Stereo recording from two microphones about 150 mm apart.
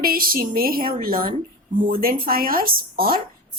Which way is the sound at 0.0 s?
75° right (ahead or behind).